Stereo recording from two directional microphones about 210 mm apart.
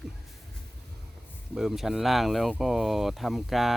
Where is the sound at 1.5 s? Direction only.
Centre (ahead or behind).